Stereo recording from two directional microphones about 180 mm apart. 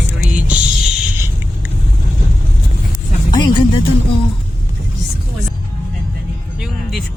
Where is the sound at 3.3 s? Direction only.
25° left (ahead or behind).